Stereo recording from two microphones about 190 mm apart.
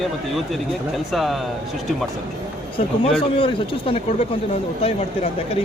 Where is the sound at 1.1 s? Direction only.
Centre (ahead or behind).